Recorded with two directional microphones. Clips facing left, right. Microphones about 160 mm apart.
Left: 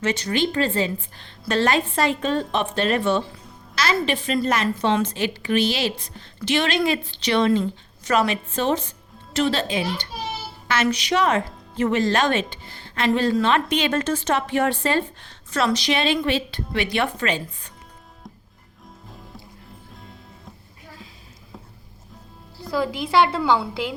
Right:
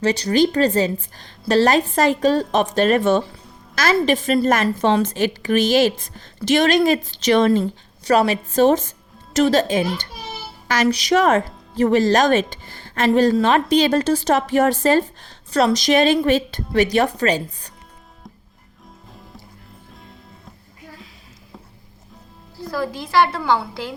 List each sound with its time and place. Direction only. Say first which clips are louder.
0.0 s a woman's voice: right 6 dB; 35° right (ahead or behind)
8.0 s a woman's voice: right 4 dB; 35° right (ahead or behind)
22.6 s a woman's voice: left 1 dB; 15° left (ahead or behind)